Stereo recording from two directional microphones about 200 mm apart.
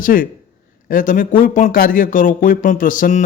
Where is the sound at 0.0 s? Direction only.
45° left (ahead or behind).